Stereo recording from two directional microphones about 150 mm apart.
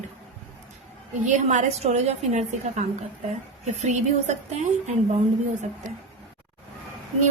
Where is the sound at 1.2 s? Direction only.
55° right (ahead or behind).